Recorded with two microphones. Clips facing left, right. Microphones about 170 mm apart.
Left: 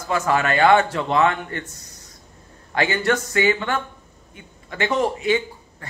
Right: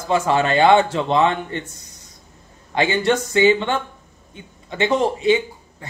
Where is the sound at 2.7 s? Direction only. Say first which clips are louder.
Right 2 dB; 20° right (ahead or behind).